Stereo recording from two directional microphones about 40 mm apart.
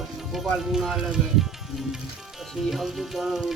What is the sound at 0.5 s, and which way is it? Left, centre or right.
Music, centre.